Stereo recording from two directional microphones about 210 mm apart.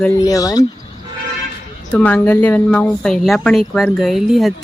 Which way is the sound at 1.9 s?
10° left (ahead or behind).